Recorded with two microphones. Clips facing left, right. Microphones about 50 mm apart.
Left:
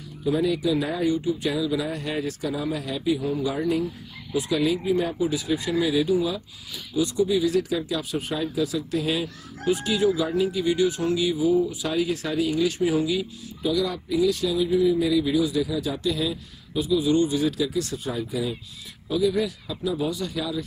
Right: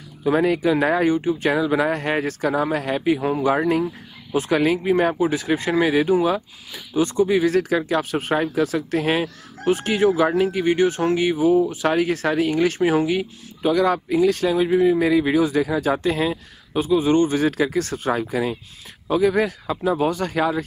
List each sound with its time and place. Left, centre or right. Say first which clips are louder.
0.2 s speech: right 5 dB; right